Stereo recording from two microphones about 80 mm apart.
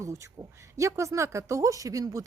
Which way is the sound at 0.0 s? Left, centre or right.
Right.